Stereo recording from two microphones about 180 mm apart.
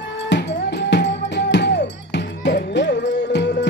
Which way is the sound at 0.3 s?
70° left (ahead or behind).